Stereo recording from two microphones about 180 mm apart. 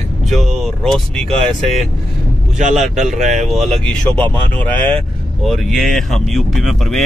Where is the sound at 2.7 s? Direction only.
Centre (ahead or behind).